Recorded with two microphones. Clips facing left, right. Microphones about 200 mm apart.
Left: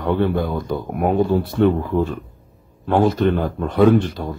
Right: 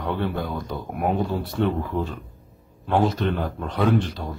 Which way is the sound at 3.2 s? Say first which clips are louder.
Left 7 dB; centre (ahead or behind).